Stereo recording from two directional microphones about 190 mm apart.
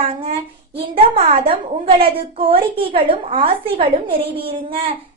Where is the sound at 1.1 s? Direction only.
30° right (ahead or behind).